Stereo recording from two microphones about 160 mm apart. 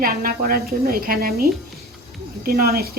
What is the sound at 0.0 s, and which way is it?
A woman's voice, 65° right (ahead or behind).